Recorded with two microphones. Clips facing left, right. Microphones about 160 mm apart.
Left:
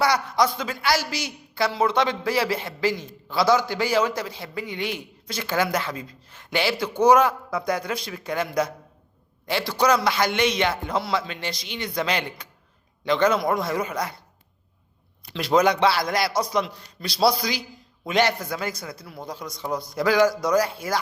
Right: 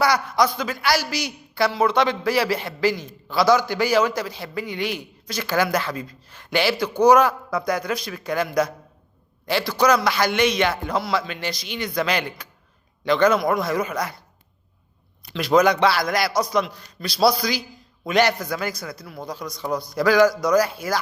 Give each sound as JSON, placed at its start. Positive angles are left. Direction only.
{"t": 0.0, "sound": "a man's voice", "side_deg": 25}
{"t": 15.3, "sound": "a man's voice", "side_deg": 30}